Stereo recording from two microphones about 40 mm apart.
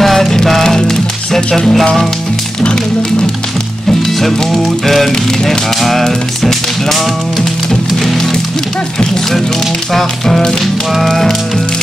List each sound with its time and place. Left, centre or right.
0.0 s music: centre
2.6 s speech: left
4.0 s music: centre
9.9 s music: centre
10.6 s music: centre
11.1 s music: centre